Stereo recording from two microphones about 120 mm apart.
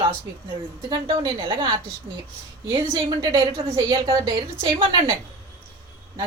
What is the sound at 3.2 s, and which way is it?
Speech, 30° right (ahead or behind).